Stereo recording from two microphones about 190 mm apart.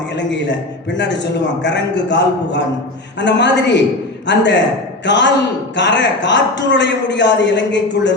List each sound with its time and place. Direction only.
0.1 s a man's voice: 70° left (ahead or behind)